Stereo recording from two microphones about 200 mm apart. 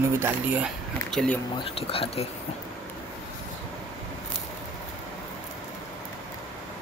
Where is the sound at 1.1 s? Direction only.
5° left (ahead or behind).